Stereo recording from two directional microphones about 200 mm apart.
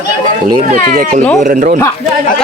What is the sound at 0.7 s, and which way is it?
Speech, 40° right (ahead or behind).